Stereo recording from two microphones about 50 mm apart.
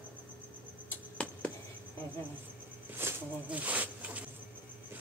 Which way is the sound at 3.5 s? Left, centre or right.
Right.